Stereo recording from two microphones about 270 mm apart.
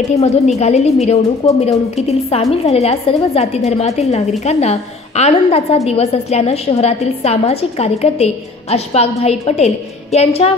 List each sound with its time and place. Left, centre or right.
0.2 s a woman's voice: left